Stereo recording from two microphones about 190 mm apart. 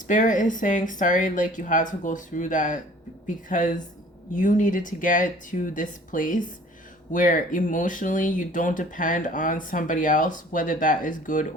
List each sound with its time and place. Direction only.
0.1 s speech: 45° left (ahead or behind)